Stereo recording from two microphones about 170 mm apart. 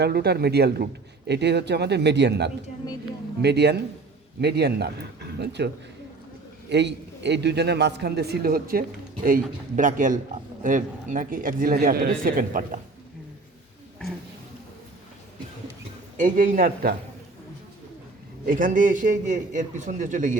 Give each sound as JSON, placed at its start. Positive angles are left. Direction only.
{"t": 0.0, "sound": "speech", "side_deg": -70}
{"t": 1.3, "sound": "a man's voice", "side_deg": -85}
{"t": 16.1, "sound": "a man's voice", "side_deg": -50}
{"t": 18.4, "sound": "a man's voice", "side_deg": -55}